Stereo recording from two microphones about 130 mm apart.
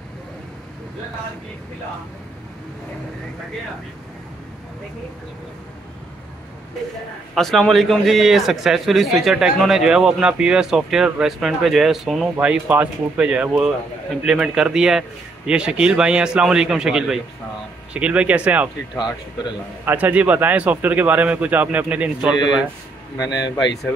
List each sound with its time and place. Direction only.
7.3 s a man's voice: centre (ahead or behind)
19.8 s a man's voice: 15° right (ahead or behind)
23.1 s a man's voice: 30° left (ahead or behind)